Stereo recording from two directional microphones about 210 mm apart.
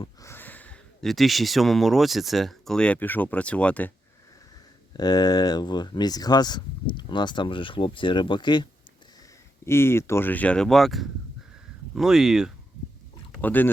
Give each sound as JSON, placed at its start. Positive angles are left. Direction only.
{"t": 0.0, "sound": "speech", "side_deg": 15}
{"t": 4.9, "sound": "speech", "side_deg": 20}
{"t": 9.6, "sound": "speech", "side_deg": 10}
{"t": 13.4, "sound": "speech", "side_deg": 10}